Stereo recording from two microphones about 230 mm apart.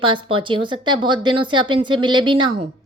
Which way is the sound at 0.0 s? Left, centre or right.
Right.